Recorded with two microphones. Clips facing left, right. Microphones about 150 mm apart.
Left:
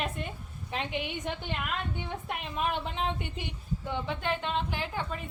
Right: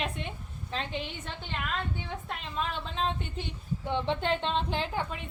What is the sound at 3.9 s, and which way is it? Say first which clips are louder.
Speech: right 4 dB; 25° right (ahead or behind).